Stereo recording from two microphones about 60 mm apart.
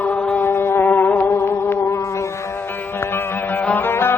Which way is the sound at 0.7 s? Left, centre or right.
Left.